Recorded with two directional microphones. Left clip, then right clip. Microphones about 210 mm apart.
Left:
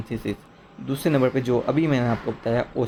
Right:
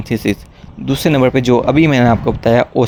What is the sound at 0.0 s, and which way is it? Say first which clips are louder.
Speech: right 12 dB; 40° right (ahead or behind).